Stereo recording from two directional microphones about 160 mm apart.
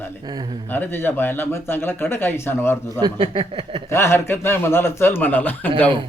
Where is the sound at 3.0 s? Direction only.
35° right (ahead or behind).